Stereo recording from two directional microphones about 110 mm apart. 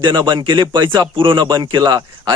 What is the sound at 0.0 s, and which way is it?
Speech, 45° right (ahead or behind).